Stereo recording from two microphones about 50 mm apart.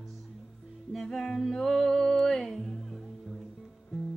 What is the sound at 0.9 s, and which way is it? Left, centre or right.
Music, centre.